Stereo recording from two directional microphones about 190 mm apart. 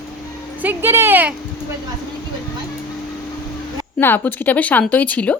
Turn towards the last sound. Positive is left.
turn(degrees=10)  # may be behind; listen again after turning